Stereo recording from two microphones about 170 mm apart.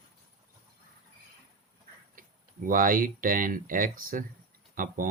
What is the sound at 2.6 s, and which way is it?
Speech, 55° right (ahead or behind).